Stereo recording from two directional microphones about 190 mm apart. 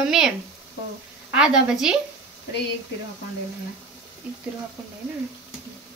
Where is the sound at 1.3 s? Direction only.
5° right (ahead or behind).